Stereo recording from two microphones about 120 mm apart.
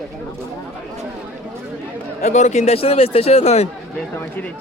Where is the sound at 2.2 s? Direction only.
75° left (ahead or behind).